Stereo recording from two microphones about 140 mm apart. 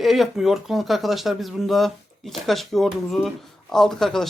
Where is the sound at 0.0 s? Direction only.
Centre (ahead or behind).